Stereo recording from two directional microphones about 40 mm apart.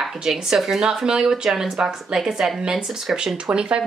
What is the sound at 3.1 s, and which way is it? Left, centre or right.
Speech, right.